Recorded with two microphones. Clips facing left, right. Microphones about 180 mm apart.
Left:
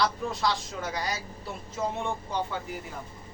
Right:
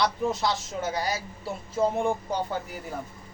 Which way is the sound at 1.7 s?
35° right (ahead or behind).